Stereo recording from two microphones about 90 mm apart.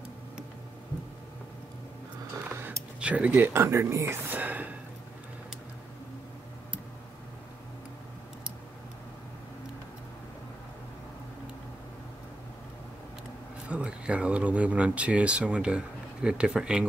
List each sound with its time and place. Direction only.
2.5 s a sound: 25° right (ahead or behind)
3.0 s speech: 15° right (ahead or behind)
13.7 s speech: 10° right (ahead or behind)